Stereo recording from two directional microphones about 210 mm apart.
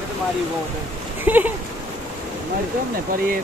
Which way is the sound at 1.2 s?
10° right (ahead or behind).